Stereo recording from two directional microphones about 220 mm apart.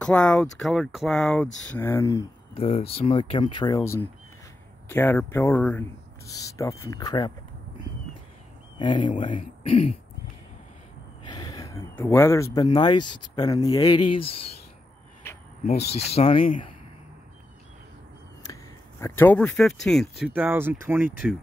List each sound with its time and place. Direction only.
0.0 s speech: 5° left (ahead or behind)
2.6 s speech: 25° left (ahead or behind)
8.7 s speech: 20° left (ahead or behind)
11.2 s gasp: 15° left (ahead or behind)
12.6 s speech: 20° left (ahead or behind)
13.0 s speech: 90° left
13.4 s speech: 15° left (ahead or behind)
16.1 s speech: 25° left (ahead or behind)
18.4 s speech: 15° left (ahead or behind); by 21.4 s 5° right (ahead or behind)